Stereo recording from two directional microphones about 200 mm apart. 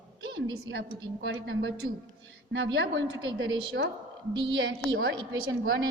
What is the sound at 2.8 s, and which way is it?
A woman's voice, 65° right (ahead or behind).